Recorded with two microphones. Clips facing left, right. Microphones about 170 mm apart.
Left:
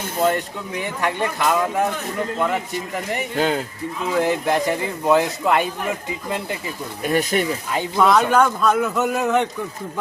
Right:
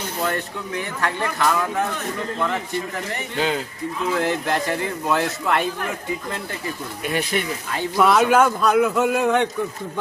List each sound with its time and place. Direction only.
0.2 s speech: 20° left (ahead or behind)
3.3 s a man's voice: 45° left (ahead or behind)
4.2 s speech: 15° left (ahead or behind)
7.0 s speech: 40° left (ahead or behind)
7.9 s a man's voice: 5° right (ahead or behind)